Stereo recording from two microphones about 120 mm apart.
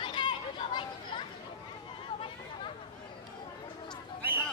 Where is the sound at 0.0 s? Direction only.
45° left (ahead or behind).